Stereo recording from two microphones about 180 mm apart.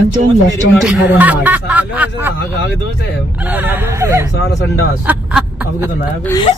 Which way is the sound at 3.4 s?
10° right (ahead or behind).